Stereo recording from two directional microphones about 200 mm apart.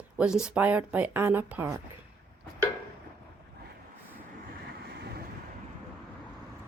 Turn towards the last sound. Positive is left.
turn(degrees=-55)  # may be behind; listen again after turning